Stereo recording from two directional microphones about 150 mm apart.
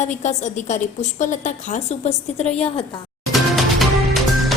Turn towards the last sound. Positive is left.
turn(degrees=0)  # may be behind; listen again after turning